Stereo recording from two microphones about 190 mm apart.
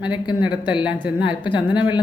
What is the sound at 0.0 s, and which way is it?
Speech, 25° left (ahead or behind).